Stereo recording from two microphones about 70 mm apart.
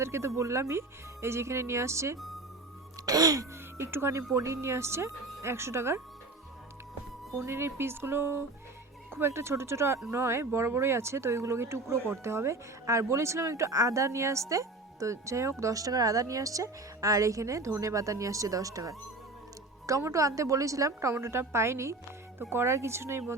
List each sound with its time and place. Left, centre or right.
0.0 s speech: right
3.1 s music: right
3.8 s speech: right
7.3 s speech: right
15.6 s speech: right